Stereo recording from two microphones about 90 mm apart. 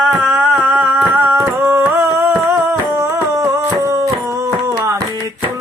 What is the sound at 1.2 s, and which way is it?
Music, 25° right (ahead or behind).